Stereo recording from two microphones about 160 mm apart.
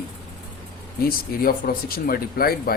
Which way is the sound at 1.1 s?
70° left (ahead or behind).